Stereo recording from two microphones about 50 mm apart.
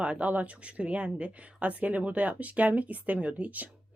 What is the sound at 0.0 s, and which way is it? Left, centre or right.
A woman's voice, right.